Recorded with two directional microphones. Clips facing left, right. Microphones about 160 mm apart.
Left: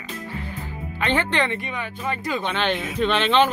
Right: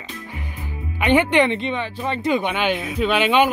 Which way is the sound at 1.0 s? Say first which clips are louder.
Right 6 dB; 15° right (ahead or behind).